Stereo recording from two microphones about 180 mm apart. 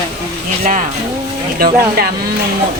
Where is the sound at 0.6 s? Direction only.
45° right (ahead or behind).